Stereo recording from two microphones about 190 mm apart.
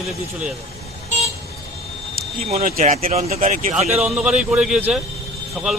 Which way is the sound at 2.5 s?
40° right (ahead or behind).